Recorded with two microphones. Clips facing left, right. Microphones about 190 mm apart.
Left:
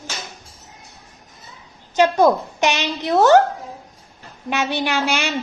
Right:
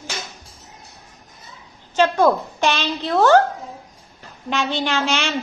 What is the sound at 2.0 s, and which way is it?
A child's voice, 10° left (ahead or behind).